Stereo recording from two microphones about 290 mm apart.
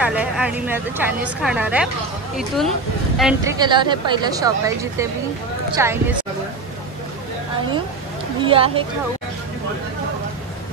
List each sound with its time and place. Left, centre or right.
0.0 s speech: centre
3.5 s speech: centre
8.4 s speech: centre